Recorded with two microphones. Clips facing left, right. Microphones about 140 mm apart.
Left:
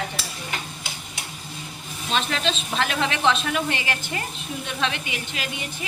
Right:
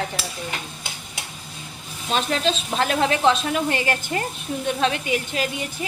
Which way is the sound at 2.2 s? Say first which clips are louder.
Right 3 dB; 40° right (ahead or behind).